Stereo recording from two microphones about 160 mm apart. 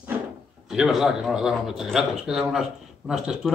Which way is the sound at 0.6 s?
5° right (ahead or behind).